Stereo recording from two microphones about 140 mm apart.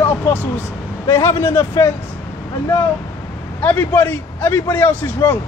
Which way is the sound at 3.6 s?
10° left (ahead or behind).